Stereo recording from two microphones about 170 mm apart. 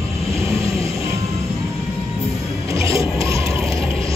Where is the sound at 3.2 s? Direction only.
20° right (ahead or behind).